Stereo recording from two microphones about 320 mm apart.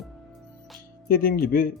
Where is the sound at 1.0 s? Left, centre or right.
Left.